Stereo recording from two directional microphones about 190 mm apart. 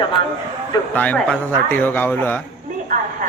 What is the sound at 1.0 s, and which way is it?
Speech, 5° left (ahead or behind).